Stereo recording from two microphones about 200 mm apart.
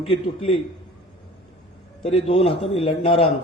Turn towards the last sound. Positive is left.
turn(degrees=25)  # may be behind; listen again after turning